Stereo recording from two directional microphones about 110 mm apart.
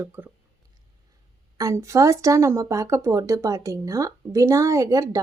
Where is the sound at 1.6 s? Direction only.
30° right (ahead or behind).